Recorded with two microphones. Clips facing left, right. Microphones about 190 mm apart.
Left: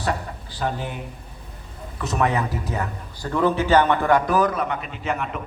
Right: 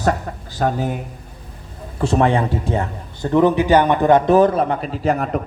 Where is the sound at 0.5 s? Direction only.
45° right (ahead or behind).